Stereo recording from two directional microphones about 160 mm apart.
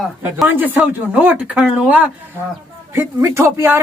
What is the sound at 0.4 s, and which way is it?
Speech, 10° right (ahead or behind).